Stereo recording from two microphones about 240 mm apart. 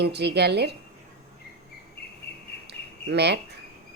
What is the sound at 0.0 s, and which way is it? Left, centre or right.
Speech, right.